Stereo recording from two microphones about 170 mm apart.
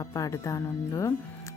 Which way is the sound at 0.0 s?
20° left (ahead or behind).